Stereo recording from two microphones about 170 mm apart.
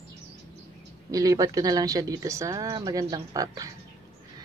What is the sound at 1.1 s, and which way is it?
Speech, 20° right (ahead or behind).